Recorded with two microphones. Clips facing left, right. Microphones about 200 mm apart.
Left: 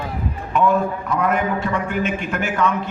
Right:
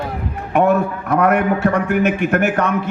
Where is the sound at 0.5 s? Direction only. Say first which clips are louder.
Right 3 dB; 65° right (ahead or behind).